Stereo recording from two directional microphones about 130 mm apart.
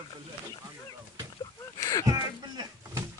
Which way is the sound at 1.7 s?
25° left (ahead or behind).